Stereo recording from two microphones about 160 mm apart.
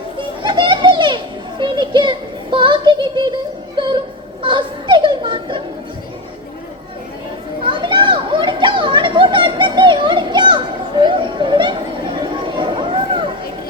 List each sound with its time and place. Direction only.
0.2 s children playing: 30° right (ahead or behind)
3.8 s music: 30° right (ahead or behind)
4.4 s children playing: 30° right (ahead or behind)
7.6 s children playing: 30° right (ahead or behind)
12.2 s chatter: 30° right (ahead or behind)